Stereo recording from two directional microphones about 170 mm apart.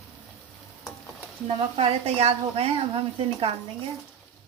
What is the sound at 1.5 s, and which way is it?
Speech, 35° right (ahead or behind).